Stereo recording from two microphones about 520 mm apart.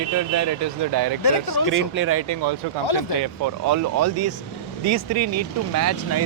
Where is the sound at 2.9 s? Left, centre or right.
Left.